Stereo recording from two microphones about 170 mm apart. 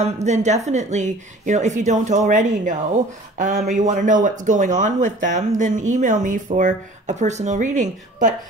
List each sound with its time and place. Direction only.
0.0 s speech: 40° right (ahead or behind)